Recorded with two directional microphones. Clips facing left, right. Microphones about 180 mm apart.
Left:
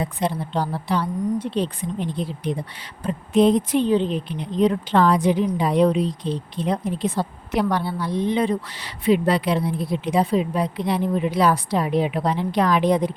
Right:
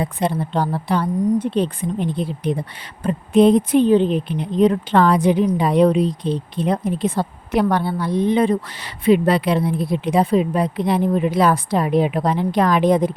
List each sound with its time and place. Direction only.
0.0 s a woman's voice: 60° right (ahead or behind)